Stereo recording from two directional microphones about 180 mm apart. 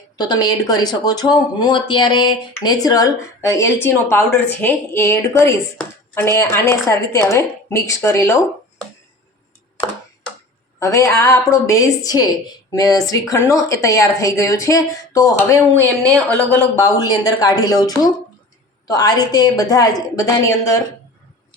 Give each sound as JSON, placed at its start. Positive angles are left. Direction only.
{"t": 0.2, "sound": "speech", "side_deg": 25}
{"t": 2.5, "sound": "a woman's voice", "side_deg": 15}
{"t": 10.8, "sound": "a woman's voice", "side_deg": 15}